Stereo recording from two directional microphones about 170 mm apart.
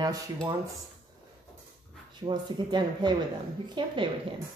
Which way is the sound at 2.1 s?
25° right (ahead or behind).